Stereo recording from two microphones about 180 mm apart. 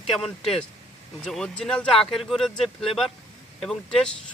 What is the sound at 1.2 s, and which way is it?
Speech, 5° left (ahead or behind).